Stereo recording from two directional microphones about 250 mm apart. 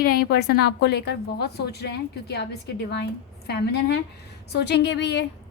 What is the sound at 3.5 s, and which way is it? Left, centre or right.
A woman's voice, left.